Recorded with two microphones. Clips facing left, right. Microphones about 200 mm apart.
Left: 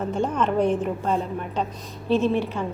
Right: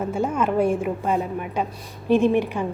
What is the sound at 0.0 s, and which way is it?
A woman's voice, 10° right (ahead or behind).